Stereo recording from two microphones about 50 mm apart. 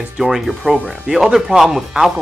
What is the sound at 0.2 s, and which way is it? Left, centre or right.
Speech, centre.